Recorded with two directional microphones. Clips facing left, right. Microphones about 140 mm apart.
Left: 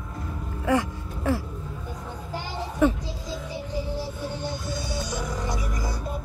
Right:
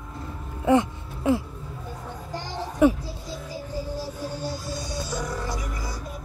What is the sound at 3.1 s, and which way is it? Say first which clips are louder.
Music: left 2 dB; 70° left (ahead or behind).